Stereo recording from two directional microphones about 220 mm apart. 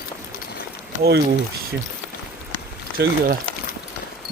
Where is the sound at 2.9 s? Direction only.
45° right (ahead or behind).